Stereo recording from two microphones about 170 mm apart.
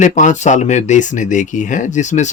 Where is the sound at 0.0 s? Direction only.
45° left (ahead or behind).